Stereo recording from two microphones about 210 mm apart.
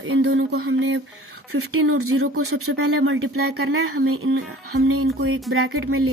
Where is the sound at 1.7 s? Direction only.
90° right.